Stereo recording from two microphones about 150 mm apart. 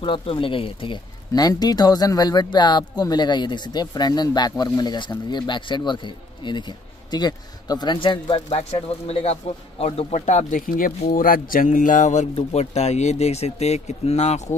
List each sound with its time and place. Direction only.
0.0 s a man's voice: 35° left (ahead or behind)